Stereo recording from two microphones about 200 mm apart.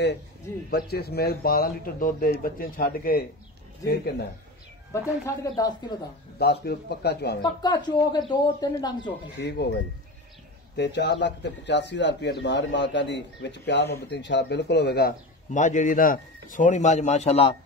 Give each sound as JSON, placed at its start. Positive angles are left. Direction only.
{"t": 0.7, "sound": "a man's voice", "side_deg": 50}
{"t": 4.9, "sound": "speech", "side_deg": 15}
{"t": 6.3, "sound": "a man's voice", "side_deg": 55}
{"t": 7.4, "sound": "speech", "side_deg": 20}
{"t": 9.4, "sound": "speech", "side_deg": 55}
{"t": 10.8, "sound": "a man's voice", "side_deg": 60}